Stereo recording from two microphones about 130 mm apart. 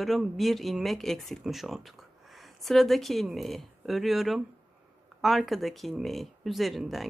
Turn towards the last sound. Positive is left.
turn(degrees=0)  # may be behind; listen again after turning